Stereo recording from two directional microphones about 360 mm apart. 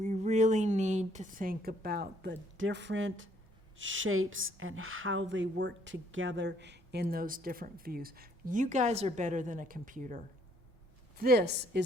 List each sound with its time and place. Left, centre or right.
0.0 s a woman's voice: centre